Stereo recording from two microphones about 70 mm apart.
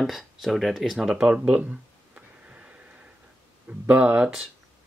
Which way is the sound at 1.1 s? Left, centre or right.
Centre.